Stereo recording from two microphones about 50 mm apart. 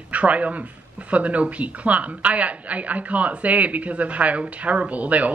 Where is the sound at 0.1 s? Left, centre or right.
Right.